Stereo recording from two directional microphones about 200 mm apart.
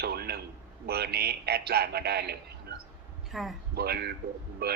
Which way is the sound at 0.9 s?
50° right (ahead or behind).